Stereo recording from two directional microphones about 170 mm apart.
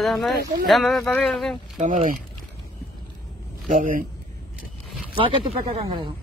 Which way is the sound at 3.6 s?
50° right (ahead or behind).